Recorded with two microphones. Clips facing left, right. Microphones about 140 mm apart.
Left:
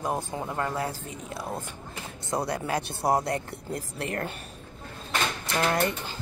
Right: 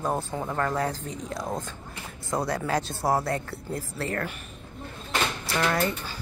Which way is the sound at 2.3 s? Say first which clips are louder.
Right 2 dB; 20° left (ahead or behind).